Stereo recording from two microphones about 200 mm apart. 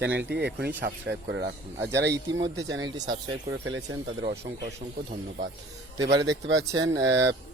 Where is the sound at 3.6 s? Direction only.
85° right.